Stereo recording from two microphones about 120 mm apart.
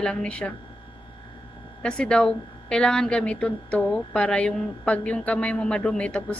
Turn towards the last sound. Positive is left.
turn(degrees=10)  # may be behind; listen again after turning